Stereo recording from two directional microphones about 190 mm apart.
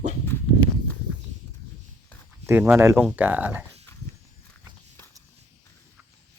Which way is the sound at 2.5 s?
10° right (ahead or behind).